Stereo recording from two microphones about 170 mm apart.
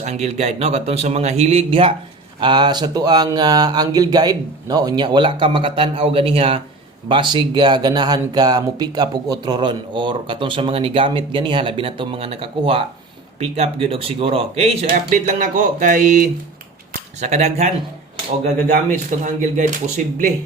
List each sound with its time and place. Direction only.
0.0 s speech: 40° right (ahead or behind)